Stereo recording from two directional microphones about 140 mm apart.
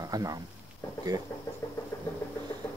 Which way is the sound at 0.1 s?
25° right (ahead or behind).